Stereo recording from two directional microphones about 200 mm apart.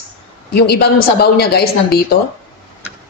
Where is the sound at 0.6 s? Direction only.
50° left (ahead or behind).